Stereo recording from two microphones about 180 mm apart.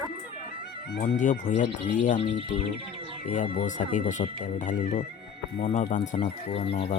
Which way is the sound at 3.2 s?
45° left (ahead or behind).